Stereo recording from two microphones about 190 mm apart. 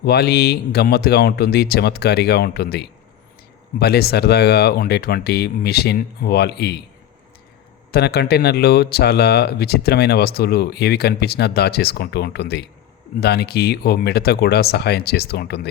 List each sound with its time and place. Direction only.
0.0 s speech: 55° left (ahead or behind)
7.9 s speech: 55° left (ahead or behind)